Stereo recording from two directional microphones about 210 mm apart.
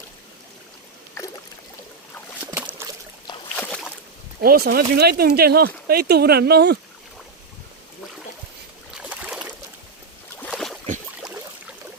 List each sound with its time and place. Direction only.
2.6 s a sound: 10° right (ahead or behind)
3.6 s boat: 5° left (ahead or behind)
4.4 s speech: 50° right (ahead or behind)
9.0 s boat: 5° right (ahead or behind)